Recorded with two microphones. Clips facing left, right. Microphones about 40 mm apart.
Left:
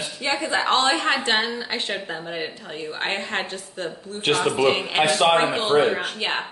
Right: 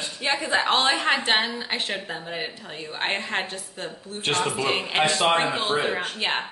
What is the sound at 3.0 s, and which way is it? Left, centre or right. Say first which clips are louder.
Speech: even; centre.